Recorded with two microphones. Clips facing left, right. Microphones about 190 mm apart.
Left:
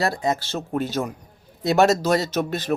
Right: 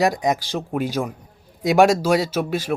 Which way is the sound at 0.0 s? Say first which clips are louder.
Right 3 dB; 15° right (ahead or behind).